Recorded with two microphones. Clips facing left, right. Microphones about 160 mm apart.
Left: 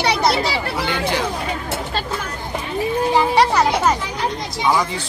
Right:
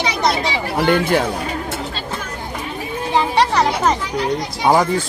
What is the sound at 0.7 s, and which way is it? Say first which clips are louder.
Speech: right 11 dB; 55° right (ahead or behind).